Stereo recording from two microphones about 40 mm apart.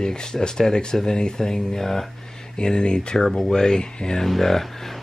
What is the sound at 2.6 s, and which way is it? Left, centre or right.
Speech, left.